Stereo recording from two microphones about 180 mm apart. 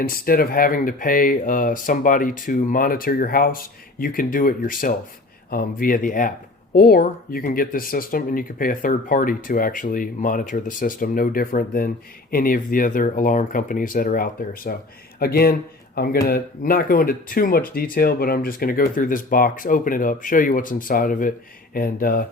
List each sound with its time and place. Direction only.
0.0 s speech: 55° left (ahead or behind)